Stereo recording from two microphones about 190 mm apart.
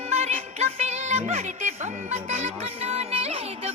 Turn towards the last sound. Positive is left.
turn(degrees=-30)  # may be behind; listen again after turning